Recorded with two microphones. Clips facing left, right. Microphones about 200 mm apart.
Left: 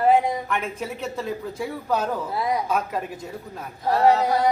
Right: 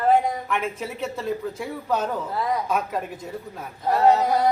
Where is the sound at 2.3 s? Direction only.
10° left (ahead or behind).